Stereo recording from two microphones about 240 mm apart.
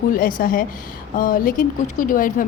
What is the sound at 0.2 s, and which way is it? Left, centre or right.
A woman's voice, left.